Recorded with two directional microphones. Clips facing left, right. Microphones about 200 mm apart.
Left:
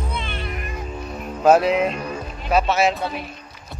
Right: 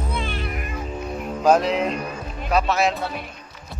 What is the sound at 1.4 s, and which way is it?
Speech, 10° left (ahead or behind).